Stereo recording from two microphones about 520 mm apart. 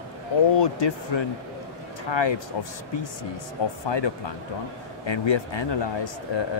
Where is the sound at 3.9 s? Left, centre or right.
Left.